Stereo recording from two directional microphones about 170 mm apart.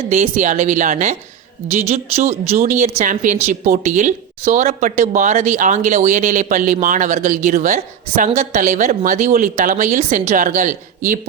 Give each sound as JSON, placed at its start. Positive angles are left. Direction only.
{"t": 0.1, "sound": "speech", "side_deg": -45}